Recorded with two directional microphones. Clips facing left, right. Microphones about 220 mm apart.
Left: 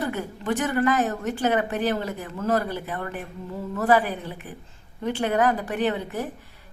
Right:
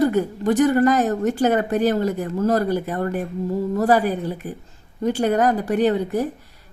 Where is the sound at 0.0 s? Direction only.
40° right (ahead or behind).